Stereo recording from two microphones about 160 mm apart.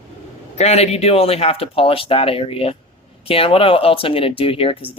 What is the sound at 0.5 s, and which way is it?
Speech, 40° left (ahead or behind).